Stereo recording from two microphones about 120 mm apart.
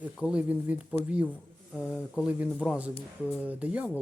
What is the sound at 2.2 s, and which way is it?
Speech, 15° right (ahead or behind).